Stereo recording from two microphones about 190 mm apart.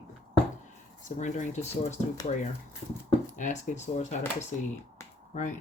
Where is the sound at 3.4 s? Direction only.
40° left (ahead or behind).